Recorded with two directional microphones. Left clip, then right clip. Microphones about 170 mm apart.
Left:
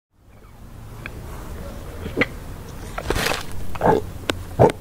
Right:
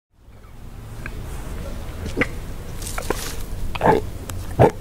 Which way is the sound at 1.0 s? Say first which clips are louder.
Even; 35° left (ahead or behind).